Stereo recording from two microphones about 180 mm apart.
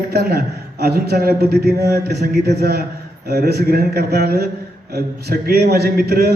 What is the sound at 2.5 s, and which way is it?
Speech, 65° right (ahead or behind).